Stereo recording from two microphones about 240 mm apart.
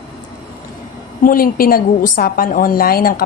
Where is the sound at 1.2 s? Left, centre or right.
Left.